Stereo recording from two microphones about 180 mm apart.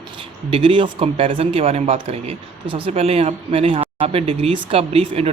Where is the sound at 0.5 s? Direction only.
30° right (ahead or behind).